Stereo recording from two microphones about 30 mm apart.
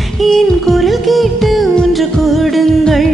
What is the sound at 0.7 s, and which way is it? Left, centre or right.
Music, centre.